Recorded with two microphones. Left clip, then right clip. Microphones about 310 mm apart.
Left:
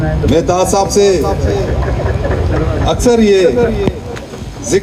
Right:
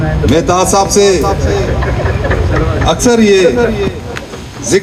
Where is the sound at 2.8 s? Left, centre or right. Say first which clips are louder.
Right 1 dB; right.